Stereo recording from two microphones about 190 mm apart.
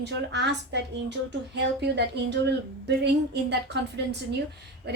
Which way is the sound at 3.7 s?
60° right (ahead or behind).